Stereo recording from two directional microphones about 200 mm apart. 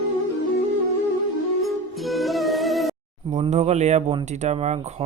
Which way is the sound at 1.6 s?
Centre (ahead or behind).